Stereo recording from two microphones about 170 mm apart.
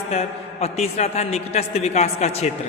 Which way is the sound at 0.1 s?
40° left (ahead or behind).